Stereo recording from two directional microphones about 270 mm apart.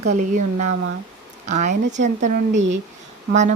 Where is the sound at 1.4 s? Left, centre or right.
Right.